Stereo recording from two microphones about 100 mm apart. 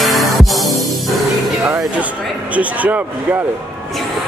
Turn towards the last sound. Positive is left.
turn(degrees=-15)  # may be behind; listen again after turning